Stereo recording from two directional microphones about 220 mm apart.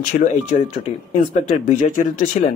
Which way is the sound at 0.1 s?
35° left (ahead or behind).